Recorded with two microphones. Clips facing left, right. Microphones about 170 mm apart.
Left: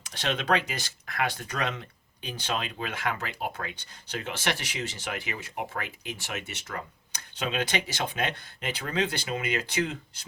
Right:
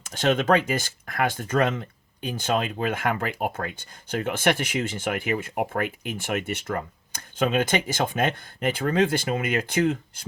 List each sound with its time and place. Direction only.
0.0 s speech: 45° right (ahead or behind)